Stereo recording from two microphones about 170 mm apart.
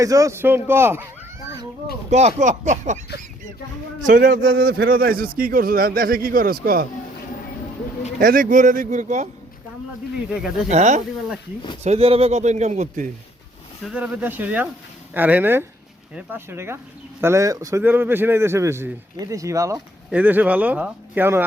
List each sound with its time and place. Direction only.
0.0 s speech: 20° right (ahead or behind)
2.0 s speech: 40° right (ahead or behind)
4.0 s a man's voice: 55° right (ahead or behind)
8.2 s speech: 55° right (ahead or behind)
10.2 s speech: 5° right (ahead or behind)
10.7 s speech: 45° right (ahead or behind)
13.8 s speech: 10° right (ahead or behind)